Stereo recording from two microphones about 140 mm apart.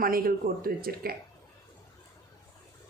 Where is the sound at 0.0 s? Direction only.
90° right.